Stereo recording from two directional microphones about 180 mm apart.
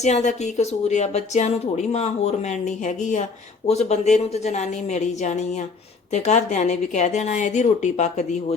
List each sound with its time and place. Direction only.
0.0 s speech: 40° left (ahead or behind)